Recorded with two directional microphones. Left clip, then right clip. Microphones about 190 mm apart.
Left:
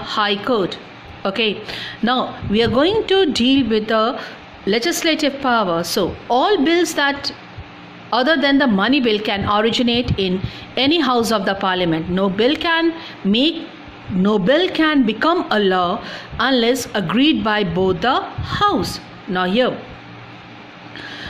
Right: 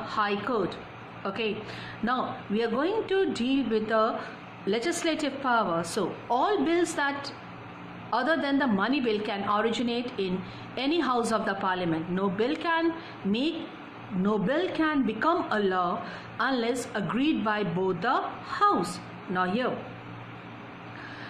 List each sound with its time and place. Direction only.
0.0 s a woman's voice: 45° left (ahead or behind)
14.2 s a woman's voice: 45° left (ahead or behind)